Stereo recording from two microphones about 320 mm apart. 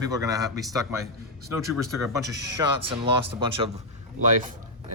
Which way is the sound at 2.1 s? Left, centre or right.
Centre.